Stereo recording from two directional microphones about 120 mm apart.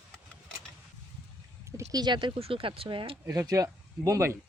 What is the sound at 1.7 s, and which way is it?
Speech, 35° right (ahead or behind).